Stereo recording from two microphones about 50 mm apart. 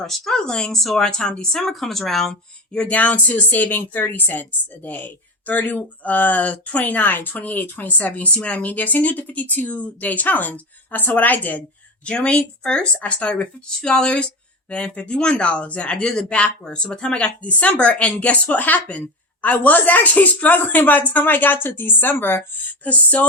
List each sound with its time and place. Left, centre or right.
0.0 s speech: centre
2.7 s a woman's voice: left
12.0 s speech: left
13.7 s a woman's voice: centre; by 22.9 s left
22.9 s speech: left